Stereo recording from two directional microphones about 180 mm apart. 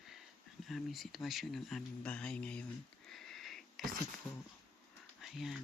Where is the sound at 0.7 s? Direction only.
Centre (ahead or behind).